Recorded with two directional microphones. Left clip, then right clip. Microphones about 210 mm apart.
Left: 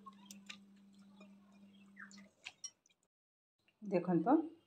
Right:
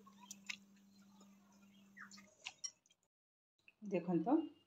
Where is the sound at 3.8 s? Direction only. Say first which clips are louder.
Left 4 dB; 25° left (ahead or behind).